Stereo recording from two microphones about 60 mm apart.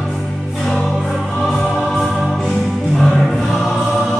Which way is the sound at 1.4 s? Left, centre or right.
Centre.